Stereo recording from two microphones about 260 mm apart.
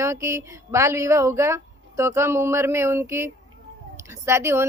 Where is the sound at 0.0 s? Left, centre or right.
Centre.